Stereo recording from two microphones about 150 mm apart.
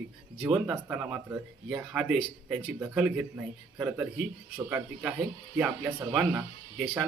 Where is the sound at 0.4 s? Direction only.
10° right (ahead or behind).